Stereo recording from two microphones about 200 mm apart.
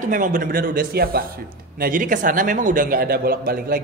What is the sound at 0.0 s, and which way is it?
A man's voice, 40° right (ahead or behind).